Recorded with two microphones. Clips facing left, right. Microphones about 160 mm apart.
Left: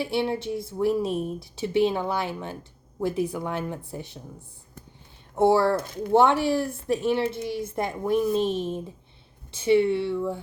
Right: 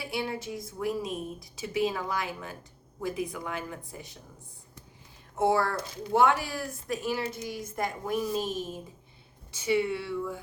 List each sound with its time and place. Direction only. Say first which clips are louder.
0.0 s a woman's voice: left 7 dB; 30° left (ahead or behind)
5.4 s a woman's voice: left 6 dB; 30° left (ahead or behind)